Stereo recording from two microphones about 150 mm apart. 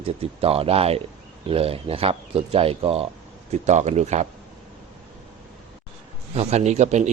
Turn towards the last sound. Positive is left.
turn(degrees=-50)  # may be behind; listen again after turning